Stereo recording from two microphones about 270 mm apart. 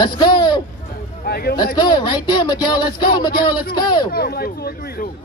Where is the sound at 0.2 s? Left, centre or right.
Centre.